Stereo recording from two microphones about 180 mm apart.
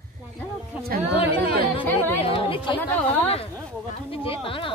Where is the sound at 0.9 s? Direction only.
55° right (ahead or behind).